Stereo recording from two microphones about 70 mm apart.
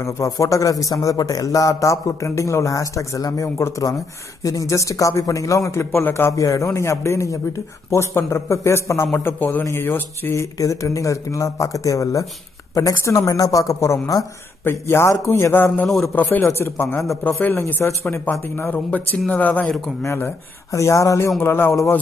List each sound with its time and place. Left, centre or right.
0.0 s a man's voice: left
5.7 s a man's voice: left
6.3 s a man's voice: left
10.4 s a man's voice: left
13.3 s a man's voice: left
14.6 s a man's voice: left
20.7 s a man's voice: left
21.4 s a man's voice: left